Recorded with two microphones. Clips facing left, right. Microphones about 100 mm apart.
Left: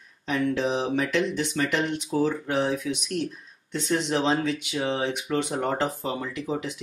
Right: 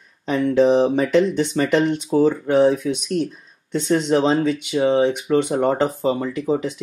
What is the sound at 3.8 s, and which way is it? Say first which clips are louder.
Speech: right 7 dB; 40° right (ahead or behind).